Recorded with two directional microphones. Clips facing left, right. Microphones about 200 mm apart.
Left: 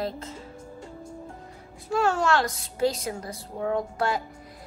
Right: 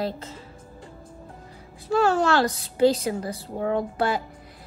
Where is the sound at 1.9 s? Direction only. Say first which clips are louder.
Right 3 dB; 35° right (ahead or behind).